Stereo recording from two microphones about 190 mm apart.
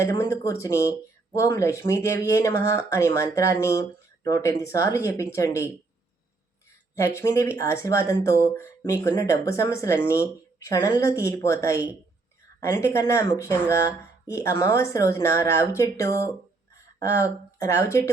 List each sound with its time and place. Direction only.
0.0 s speech: 15° left (ahead or behind)
6.9 s speech: 15° left (ahead or behind)